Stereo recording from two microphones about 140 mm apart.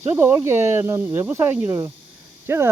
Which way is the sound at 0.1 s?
15° right (ahead or behind).